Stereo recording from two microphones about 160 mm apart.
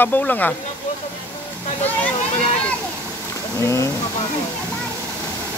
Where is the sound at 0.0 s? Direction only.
10° left (ahead or behind).